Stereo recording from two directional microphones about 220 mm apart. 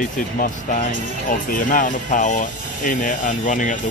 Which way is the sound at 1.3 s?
35° left (ahead or behind).